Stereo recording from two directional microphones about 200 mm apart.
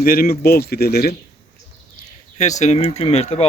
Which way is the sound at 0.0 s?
45° left (ahead or behind).